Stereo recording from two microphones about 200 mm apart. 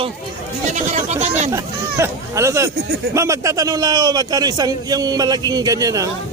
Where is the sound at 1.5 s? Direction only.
15° right (ahead or behind).